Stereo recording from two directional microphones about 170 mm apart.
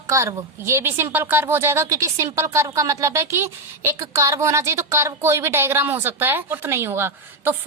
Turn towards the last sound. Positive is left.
turn(degrees=-15)  # may be behind; listen again after turning